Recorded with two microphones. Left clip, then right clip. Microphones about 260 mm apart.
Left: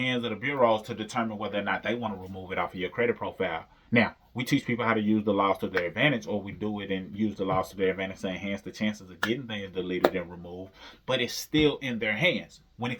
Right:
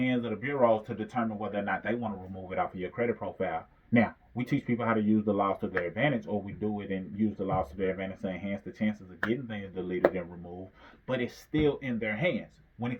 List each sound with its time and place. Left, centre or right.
0.3 s speech: centre